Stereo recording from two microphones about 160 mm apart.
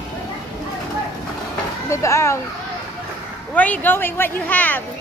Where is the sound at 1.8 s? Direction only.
20° left (ahead or behind).